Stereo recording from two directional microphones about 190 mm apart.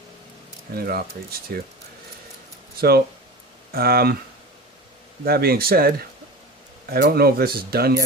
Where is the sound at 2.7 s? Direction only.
55° right (ahead or behind).